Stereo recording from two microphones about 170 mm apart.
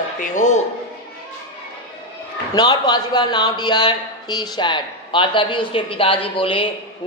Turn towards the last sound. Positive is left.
turn(degrees=30)  # may be behind; listen again after turning